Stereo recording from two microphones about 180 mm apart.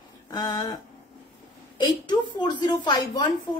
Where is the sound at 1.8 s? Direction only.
25° left (ahead or behind).